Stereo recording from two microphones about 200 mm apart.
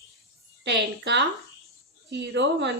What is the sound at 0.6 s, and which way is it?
A woman's voice, 60° right (ahead or behind).